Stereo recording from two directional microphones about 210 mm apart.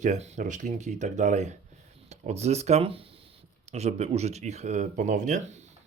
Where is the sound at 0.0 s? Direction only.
35° right (ahead or behind).